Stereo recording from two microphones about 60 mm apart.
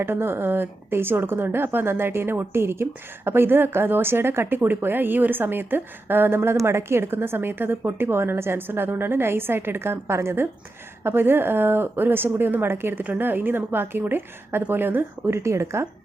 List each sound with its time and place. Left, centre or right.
0.0 s a woman's voice: right
13.0 s a woman's voice: right
15.4 s speech: right